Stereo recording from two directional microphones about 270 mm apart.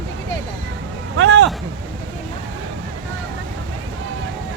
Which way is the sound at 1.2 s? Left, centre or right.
Right.